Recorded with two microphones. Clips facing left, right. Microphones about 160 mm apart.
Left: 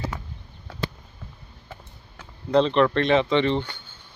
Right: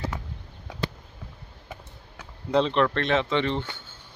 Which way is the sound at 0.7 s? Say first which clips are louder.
Even; 15° right (ahead or behind).